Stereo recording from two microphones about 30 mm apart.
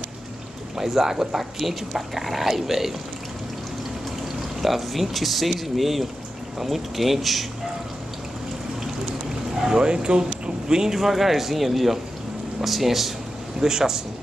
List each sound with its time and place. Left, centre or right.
0.7 s speech: centre
4.6 s speech: centre
9.7 s speech: right
10.8 s speech: centre
13.6 s a man's voice: centre